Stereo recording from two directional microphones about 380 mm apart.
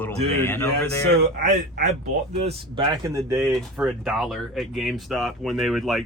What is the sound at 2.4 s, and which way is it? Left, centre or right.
Speech, centre.